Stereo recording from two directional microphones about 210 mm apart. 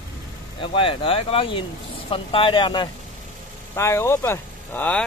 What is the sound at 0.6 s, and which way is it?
Speech, 25° left (ahead or behind).